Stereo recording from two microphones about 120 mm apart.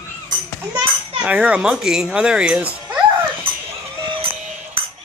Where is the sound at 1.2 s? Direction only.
10° right (ahead or behind).